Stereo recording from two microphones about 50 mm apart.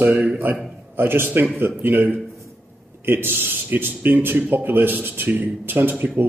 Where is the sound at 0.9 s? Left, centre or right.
Right.